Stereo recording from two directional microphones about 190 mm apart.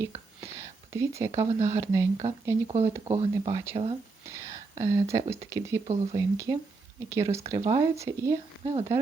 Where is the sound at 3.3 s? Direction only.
20° right (ahead or behind).